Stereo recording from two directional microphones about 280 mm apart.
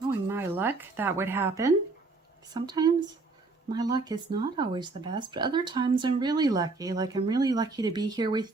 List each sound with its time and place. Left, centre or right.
0.3 s speech: centre